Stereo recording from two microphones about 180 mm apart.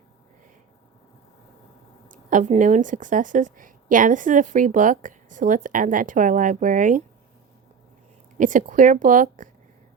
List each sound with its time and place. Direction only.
2.0 s speech: 45° right (ahead or behind)
8.4 s speech: 45° right (ahead or behind)